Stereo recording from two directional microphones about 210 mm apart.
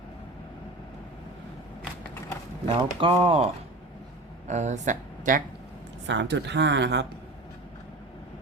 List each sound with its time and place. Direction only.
2.6 s speech: 25° right (ahead or behind)
6.1 s speech: 55° right (ahead or behind)